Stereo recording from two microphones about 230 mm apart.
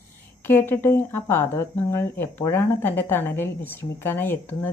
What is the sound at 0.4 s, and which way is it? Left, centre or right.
Speech, centre.